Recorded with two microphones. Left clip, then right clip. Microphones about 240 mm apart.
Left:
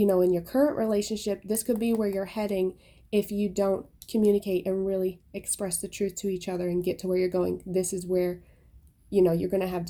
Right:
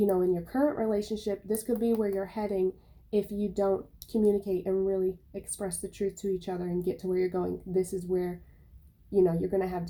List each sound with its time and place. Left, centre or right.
0.0 s speech: left